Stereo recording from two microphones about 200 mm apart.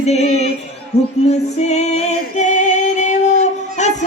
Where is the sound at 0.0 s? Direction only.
35° left (ahead or behind).